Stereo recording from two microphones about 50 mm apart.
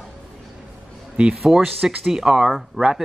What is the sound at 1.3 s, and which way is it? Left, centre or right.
Speech, centre.